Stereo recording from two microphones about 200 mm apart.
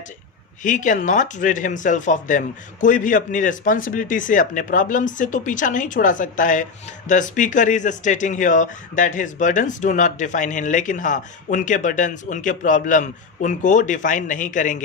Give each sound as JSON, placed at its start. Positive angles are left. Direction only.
{"t": 0.6, "sound": "speech", "side_deg": 40}